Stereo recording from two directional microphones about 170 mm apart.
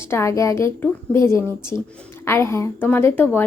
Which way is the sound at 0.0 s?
15° left (ahead or behind).